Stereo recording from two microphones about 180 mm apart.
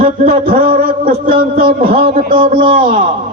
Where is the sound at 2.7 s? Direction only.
50° right (ahead or behind).